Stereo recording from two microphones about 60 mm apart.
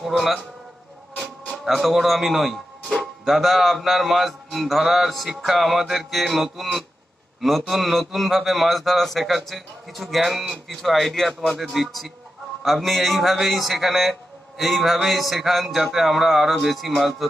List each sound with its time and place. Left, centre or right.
0.2 s speech: centre
1.6 s speech: centre